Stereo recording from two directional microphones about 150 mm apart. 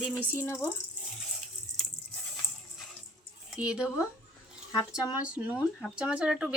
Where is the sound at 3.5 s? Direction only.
5° right (ahead or behind).